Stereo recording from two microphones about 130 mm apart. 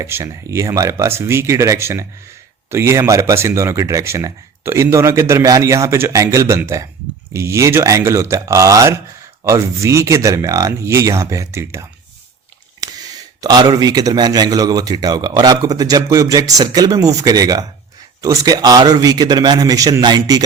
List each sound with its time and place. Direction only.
0.0 s a man's voice: 20° right (ahead or behind)